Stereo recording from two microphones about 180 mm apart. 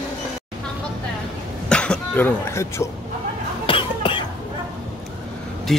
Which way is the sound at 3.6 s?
30° left (ahead or behind).